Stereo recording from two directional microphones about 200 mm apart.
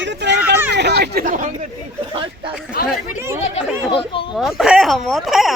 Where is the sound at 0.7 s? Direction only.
55° right (ahead or behind).